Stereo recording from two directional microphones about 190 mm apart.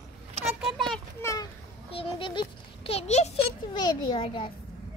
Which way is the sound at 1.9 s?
30° left (ahead or behind).